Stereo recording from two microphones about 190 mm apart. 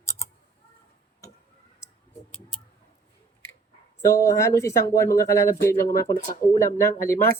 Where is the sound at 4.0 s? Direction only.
15° left (ahead or behind).